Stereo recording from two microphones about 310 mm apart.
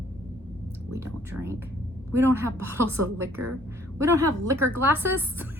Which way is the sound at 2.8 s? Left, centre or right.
Right.